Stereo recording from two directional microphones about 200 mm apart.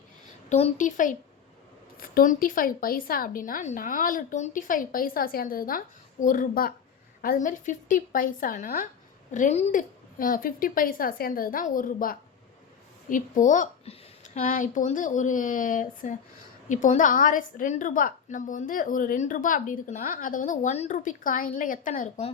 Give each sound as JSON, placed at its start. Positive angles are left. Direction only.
{"t": 0.5, "sound": "a woman's voice", "side_deg": 35}